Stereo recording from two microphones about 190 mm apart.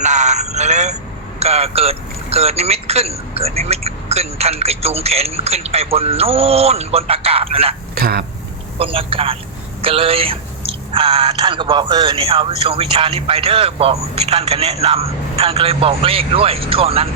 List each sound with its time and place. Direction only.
0.0 s a sound: 40° right (ahead or behind)
1.4 s speech: 35° right (ahead or behind)
7.9 s speech: 55° right (ahead or behind)
8.8 s speech: 30° right (ahead or behind)